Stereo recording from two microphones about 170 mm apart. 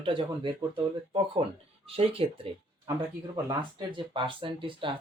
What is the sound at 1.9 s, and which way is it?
Speech, 35° right (ahead or behind).